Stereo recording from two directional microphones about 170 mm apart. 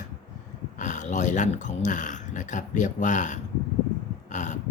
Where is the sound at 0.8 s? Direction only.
45° left (ahead or behind).